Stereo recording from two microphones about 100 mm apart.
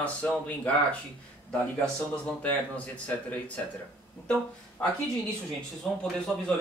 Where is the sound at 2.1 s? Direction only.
10° left (ahead or behind).